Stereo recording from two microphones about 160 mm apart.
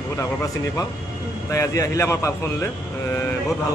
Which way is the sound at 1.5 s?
20° left (ahead or behind).